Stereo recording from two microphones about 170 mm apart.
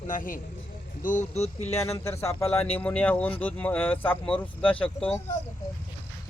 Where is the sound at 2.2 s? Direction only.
10° left (ahead or behind).